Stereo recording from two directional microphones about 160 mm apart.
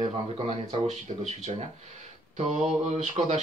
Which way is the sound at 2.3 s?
45° right (ahead or behind).